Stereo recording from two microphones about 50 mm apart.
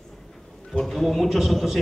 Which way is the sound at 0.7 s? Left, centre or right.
Centre.